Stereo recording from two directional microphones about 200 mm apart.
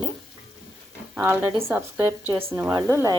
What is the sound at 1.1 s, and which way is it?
A woman's voice, 10° right (ahead or behind).